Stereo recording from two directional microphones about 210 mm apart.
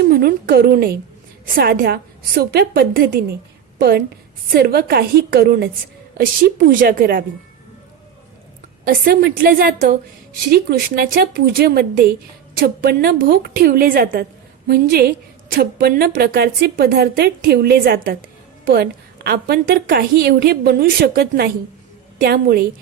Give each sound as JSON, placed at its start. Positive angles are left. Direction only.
{"t": 0.0, "sound": "a woman's voice", "side_deg": -45}
{"t": 8.8, "sound": "a woman's voice", "side_deg": -45}